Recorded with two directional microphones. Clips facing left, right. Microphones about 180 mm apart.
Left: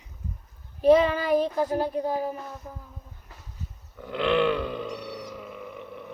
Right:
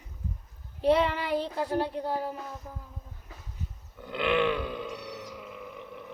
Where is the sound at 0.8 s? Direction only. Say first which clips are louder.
Left 6 dB; 30° right (ahead or behind).